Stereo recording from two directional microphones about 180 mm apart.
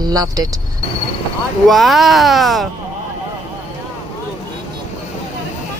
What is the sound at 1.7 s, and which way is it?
Speech, centre (ahead or behind).